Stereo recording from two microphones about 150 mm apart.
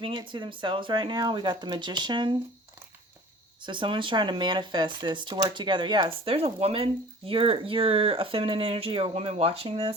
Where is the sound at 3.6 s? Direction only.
30° right (ahead or behind).